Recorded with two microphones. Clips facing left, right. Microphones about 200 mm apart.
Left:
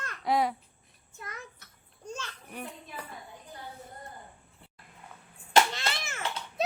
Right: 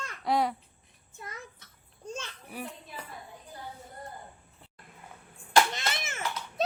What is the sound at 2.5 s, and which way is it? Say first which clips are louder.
Speech: right 1 dB; 5° right (ahead or behind).